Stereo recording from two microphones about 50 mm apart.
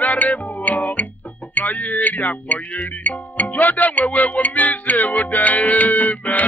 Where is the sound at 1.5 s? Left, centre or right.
Left.